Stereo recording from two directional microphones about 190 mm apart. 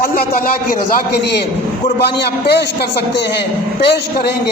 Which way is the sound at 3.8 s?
65° left (ahead or behind).